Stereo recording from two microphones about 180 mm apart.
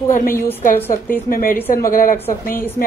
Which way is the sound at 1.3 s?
55° left (ahead or behind).